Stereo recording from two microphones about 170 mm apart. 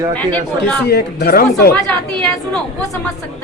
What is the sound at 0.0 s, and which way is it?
Speech, 25° right (ahead or behind).